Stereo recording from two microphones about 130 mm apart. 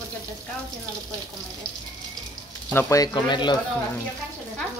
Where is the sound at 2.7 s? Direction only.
25° left (ahead or behind).